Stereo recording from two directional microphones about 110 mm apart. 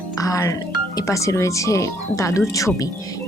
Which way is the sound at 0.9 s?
30° left (ahead or behind).